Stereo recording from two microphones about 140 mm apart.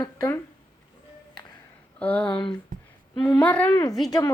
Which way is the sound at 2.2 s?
35° left (ahead or behind).